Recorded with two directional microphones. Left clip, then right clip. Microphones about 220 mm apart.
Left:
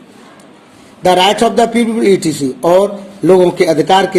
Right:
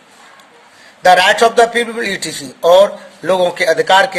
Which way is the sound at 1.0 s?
25° right (ahead or behind).